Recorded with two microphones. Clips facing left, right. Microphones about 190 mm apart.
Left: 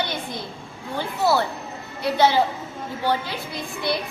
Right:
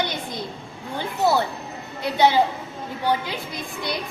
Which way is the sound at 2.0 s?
20° right (ahead or behind).